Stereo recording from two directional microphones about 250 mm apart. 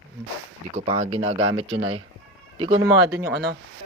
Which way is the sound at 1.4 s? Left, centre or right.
Right.